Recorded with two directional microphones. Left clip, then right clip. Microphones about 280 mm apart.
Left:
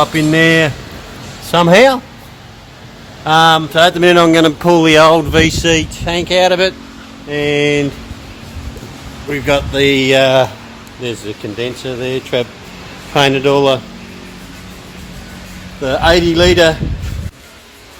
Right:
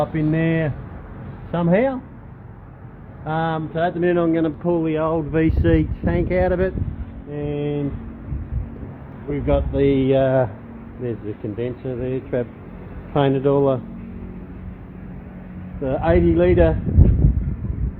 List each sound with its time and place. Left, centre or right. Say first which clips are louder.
0.0 s speech: left 11 dB; left
3.2 s speech: left 15 dB; left
5.3 s speech: left 8 dB; centre
7.3 s speech: left 12 dB; left
9.3 s speech: left 7 dB; centre
11.5 s speech: left 7 dB; centre
15.8 s speech: left 8 dB; centre